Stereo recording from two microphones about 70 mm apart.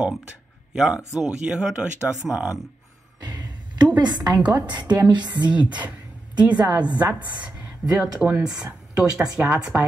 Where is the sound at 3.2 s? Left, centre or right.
Right.